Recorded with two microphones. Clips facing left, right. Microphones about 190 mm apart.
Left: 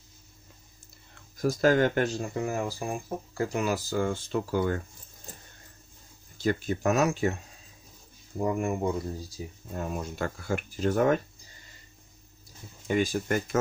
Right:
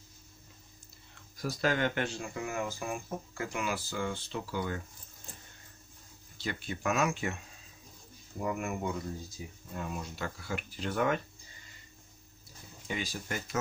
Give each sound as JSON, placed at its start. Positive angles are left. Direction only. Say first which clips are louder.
{"t": 1.4, "sound": "speech", "louder": "left 8 dB", "side_deg": 45}
{"t": 6.3, "sound": "speech", "louder": "left 10 dB", "side_deg": 45}
{"t": 8.4, "sound": "speech", "louder": "left 6 dB", "side_deg": 30}
{"t": 12.8, "sound": "speech", "louder": "left 11 dB", "side_deg": 50}